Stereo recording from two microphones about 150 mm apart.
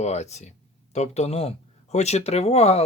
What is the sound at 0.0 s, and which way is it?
Speech, 45° left (ahead or behind).